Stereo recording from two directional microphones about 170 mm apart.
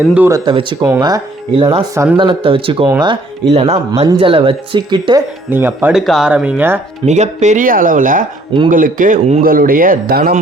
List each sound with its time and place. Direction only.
0.1 s speech: 10° right (ahead or behind)
0.3 s speech: 25° right (ahead or behind)
4.0 s speech: 20° right (ahead or behind)
4.3 s speech: 35° right (ahead or behind)
5.5 s speech: 15° right (ahead or behind)
6.0 s speech: centre (ahead or behind)
7.0 s speech: 40° right (ahead or behind); by 10.4 s 60° right (ahead or behind)